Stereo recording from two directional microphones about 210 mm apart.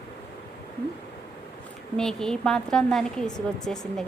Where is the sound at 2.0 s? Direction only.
5° left (ahead or behind).